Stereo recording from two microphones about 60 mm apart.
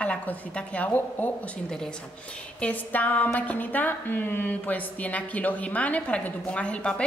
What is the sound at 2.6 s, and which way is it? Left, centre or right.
A woman's voice, left.